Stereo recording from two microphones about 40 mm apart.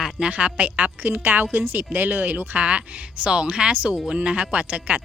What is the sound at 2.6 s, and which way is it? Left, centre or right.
Speech, right.